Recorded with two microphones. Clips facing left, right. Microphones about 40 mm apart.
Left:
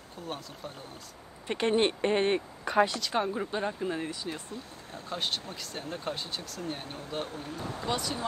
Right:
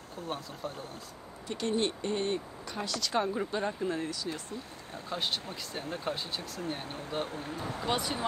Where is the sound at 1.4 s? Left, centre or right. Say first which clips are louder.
Left 5 dB; left.